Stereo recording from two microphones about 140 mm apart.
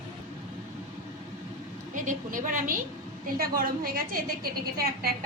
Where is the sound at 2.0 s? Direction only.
70° right (ahead or behind).